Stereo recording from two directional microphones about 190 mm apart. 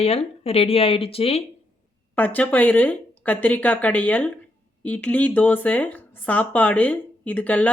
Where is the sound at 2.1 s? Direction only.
10° left (ahead or behind).